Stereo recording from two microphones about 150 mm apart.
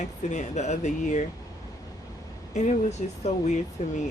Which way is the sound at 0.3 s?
50° left (ahead or behind).